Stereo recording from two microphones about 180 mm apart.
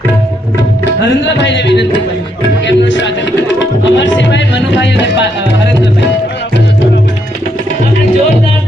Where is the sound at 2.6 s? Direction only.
90° left.